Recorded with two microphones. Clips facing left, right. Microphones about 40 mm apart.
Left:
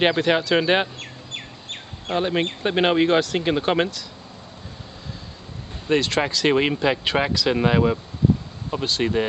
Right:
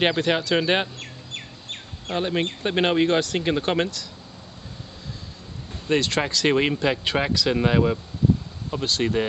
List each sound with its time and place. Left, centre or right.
0.0 s speech: centre
5.9 s speech: centre